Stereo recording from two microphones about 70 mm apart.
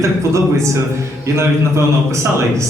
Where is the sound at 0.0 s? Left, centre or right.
Right.